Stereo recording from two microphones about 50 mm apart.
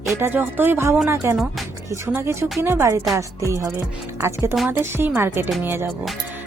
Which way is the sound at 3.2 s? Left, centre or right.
Right.